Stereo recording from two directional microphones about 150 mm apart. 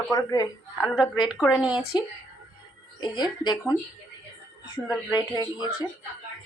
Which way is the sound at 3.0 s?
30° left (ahead or behind).